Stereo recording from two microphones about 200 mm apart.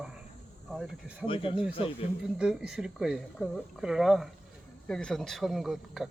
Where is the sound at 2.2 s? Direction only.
5° right (ahead or behind).